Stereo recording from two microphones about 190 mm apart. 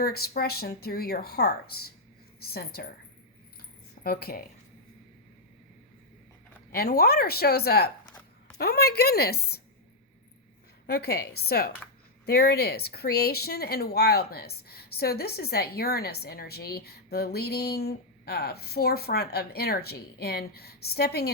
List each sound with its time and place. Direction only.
0.0 s speech: 55° left (ahead or behind)
4.0 s speech: 50° left (ahead or behind)
6.7 s speech: 55° left (ahead or behind)
10.8 s speech: 55° left (ahead or behind)